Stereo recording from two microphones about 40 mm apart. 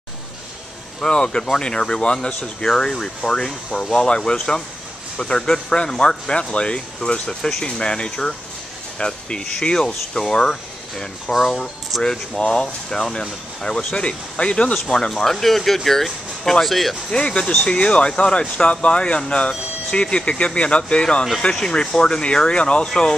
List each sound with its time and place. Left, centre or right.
1.0 s speech: left
11.3 s speech: centre
12.0 s speech: centre
14.9 s speech: centre
17.1 s speech: left